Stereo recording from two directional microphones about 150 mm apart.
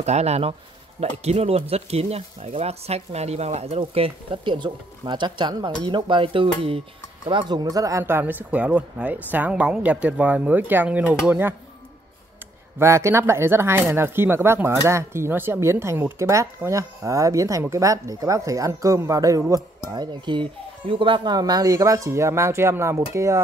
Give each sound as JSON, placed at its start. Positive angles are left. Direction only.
{"t": 0.0, "sound": "a woman's voice", "side_deg": -45}
{"t": 12.7, "sound": "a woman's voice", "side_deg": -20}